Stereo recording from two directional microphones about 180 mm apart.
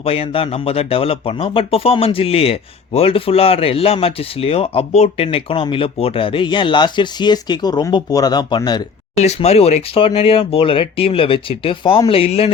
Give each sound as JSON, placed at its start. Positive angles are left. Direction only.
{"t": 0.0, "sound": "speech", "side_deg": 35}
{"t": 9.1, "sound": "speech", "side_deg": 35}